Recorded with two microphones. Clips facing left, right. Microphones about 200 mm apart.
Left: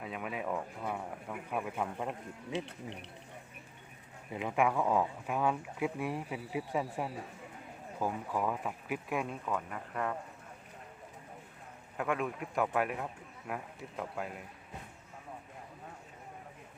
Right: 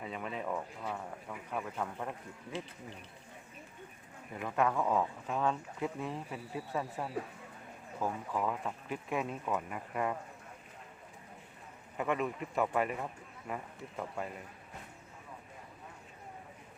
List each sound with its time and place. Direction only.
0.0 s speech: 5° left (ahead or behind)
2.6 s speech: 70° left (ahead or behind)
4.3 s speech: 15° left (ahead or behind); by 10.2 s 5° right (ahead or behind)
11.9 s speech: centre (ahead or behind)